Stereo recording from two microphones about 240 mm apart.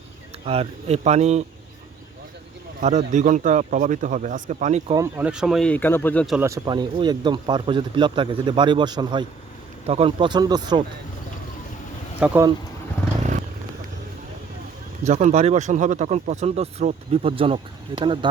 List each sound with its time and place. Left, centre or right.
0.4 s speech: right
2.8 s a man's voice: right
4.9 s speech: centre
6.4 s speech: centre
12.2 s speech: centre
15.0 s speech: right